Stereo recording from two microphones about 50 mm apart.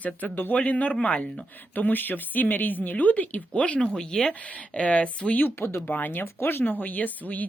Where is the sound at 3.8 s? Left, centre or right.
Centre.